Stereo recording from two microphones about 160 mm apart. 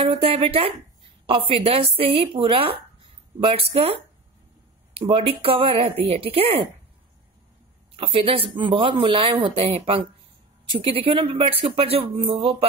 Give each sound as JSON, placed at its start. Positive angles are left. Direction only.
{"t": 0.0, "sound": "speech", "side_deg": -35}
{"t": 7.9, "sound": "speech", "side_deg": -35}